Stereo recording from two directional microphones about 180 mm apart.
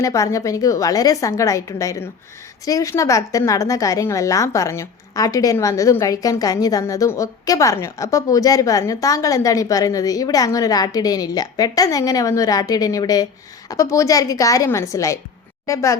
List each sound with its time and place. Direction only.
0.0 s a woman's voice: 20° left (ahead or behind)